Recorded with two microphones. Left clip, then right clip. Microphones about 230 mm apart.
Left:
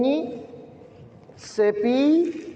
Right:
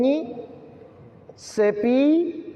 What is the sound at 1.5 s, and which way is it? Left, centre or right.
Speech, right.